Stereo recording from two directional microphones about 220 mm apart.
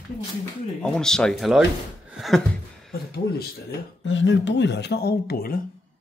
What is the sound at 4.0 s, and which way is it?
Speech, 55° left (ahead or behind).